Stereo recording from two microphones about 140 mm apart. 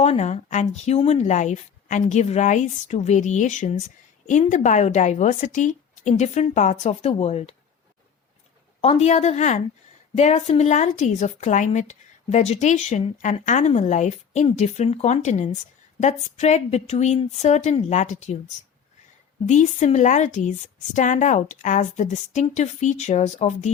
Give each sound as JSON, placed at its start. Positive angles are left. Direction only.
{"t": 0.0, "sound": "a woman's voice", "side_deg": 50}
{"t": 8.8, "sound": "a woman's voice", "side_deg": 50}